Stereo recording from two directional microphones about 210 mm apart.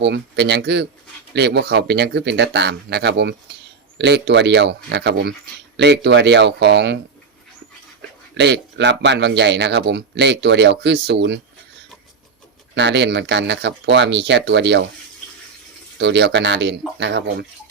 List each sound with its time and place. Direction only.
0.0 s speech: 55° right (ahead or behind)
8.4 s speech: 55° right (ahead or behind)
12.7 s speech: 55° right (ahead or behind)
16.0 s speech: 55° right (ahead or behind)